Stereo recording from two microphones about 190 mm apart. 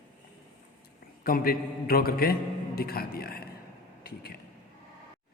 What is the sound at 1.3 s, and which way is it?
A man's voice, 50° left (ahead or behind).